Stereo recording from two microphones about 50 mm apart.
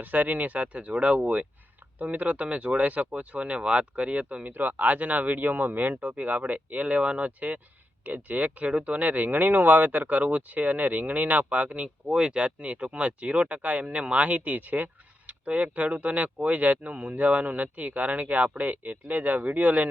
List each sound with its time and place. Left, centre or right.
0.0 s speech: right
4.5 s speech: right